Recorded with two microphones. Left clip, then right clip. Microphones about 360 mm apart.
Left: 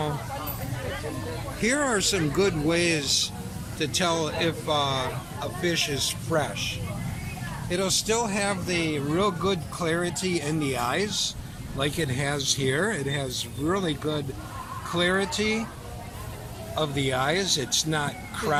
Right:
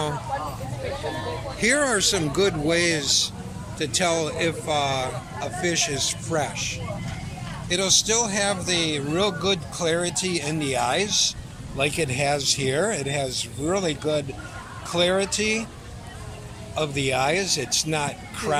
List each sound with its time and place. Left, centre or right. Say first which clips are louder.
1.6 s speech: right 4 dB; centre
16.7 s speech: right 2 dB; centre